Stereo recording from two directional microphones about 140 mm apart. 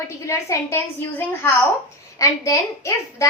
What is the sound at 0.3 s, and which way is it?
Speech, 20° left (ahead or behind).